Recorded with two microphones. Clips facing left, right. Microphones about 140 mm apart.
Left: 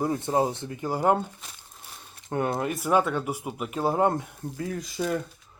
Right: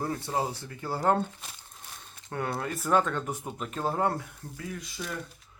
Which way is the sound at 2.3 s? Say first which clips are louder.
Left 5 dB; 20° left (ahead or behind).